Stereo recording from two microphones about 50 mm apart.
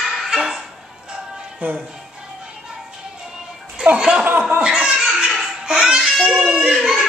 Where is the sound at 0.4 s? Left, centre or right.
Centre.